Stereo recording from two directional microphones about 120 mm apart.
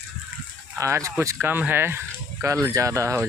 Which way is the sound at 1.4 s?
15° right (ahead or behind).